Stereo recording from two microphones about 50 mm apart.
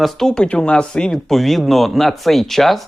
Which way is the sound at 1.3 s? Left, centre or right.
Centre.